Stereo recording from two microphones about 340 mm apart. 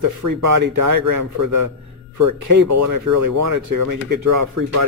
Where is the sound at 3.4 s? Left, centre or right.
Right.